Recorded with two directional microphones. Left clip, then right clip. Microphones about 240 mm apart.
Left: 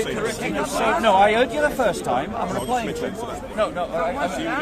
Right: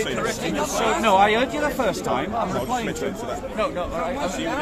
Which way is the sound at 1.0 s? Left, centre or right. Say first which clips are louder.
Left 1 dB; centre.